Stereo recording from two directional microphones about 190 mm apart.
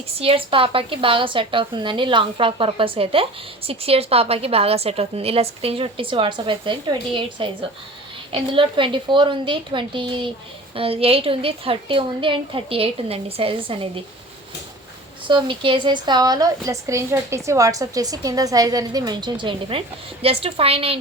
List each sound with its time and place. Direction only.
0.2 s a woman's voice: 30° right (ahead or behind)
15.3 s a woman's voice: 25° right (ahead or behind)